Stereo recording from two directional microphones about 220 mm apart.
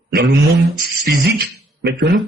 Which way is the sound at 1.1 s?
50° right (ahead or behind).